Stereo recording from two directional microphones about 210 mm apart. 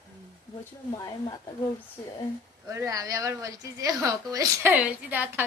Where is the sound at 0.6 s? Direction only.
15° left (ahead or behind).